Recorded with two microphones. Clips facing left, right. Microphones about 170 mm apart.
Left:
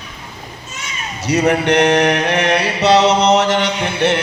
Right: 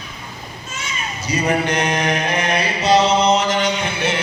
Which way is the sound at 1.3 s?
70° left (ahead or behind).